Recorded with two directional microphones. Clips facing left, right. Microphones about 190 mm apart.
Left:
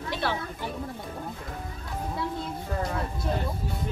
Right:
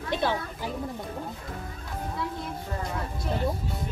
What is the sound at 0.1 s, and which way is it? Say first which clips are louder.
Speech: right 3 dB; 15° right (ahead or behind).